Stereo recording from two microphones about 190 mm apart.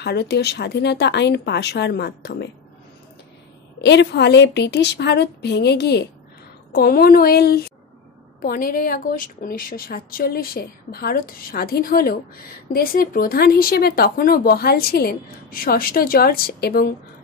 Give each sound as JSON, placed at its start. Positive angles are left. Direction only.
{"t": 0.0, "sound": "speech", "side_deg": 60}
{"t": 3.8, "sound": "speech", "side_deg": 65}